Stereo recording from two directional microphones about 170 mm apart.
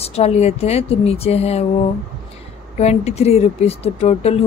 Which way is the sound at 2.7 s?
40° left (ahead or behind).